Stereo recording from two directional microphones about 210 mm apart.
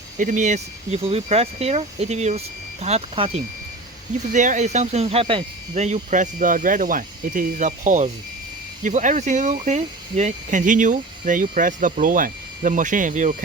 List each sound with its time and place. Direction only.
0.2 s speech: 35° right (ahead or behind)